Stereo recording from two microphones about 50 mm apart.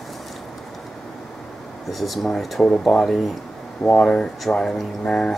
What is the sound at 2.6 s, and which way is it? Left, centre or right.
Speech, centre.